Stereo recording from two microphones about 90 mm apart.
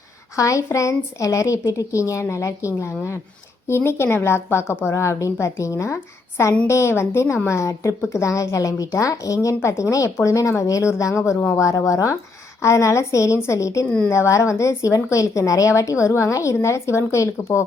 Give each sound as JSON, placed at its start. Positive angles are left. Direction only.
{"t": 0.3, "sound": "a woman's voice", "side_deg": 35}